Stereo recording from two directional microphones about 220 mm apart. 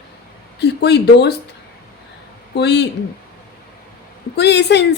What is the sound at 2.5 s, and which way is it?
Speech, 50° left (ahead or behind).